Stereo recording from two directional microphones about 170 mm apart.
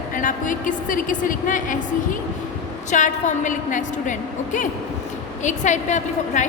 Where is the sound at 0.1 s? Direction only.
50° left (ahead or behind).